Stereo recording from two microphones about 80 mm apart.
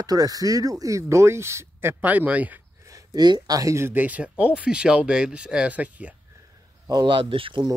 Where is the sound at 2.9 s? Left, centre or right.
Right.